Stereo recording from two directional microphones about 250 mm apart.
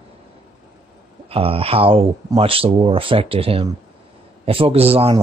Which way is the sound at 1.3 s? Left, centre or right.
Right.